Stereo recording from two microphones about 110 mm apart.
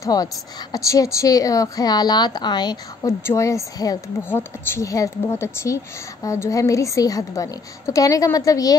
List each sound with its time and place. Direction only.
0.0 s a woman's voice: 35° left (ahead or behind)
3.1 s speech: 25° left (ahead or behind)
4.2 s a woman's voice: 20° left (ahead or behind)